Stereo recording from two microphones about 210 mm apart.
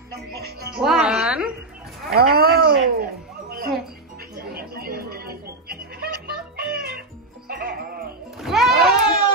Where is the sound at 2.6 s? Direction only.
50° right (ahead or behind).